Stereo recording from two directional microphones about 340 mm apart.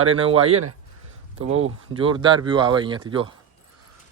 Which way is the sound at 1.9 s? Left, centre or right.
Centre.